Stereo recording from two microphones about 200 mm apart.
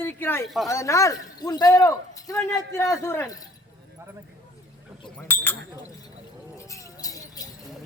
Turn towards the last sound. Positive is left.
turn(degrees=20)  # may be behind; listen again after turning